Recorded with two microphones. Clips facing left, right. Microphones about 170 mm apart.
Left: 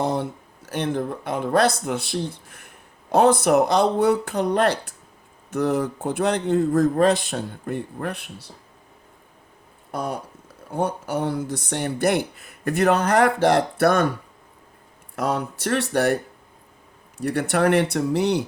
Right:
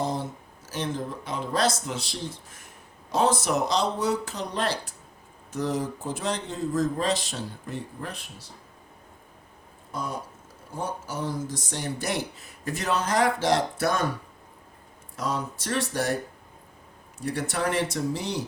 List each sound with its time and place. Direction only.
0.0 s speech: 65° left (ahead or behind)
9.9 s speech: 65° left (ahead or behind)
15.1 s speech: 60° left (ahead or behind)
17.2 s speech: 65° left (ahead or behind)